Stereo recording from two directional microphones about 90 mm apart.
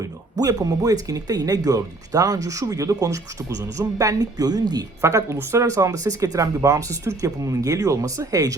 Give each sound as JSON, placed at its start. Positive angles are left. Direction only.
{"t": 0.0, "sound": "speech", "side_deg": -40}
{"t": 5.0, "sound": "speech", "side_deg": -35}